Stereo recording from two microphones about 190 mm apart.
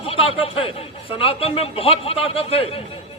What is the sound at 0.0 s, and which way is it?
A man's voice, 30° left (ahead or behind).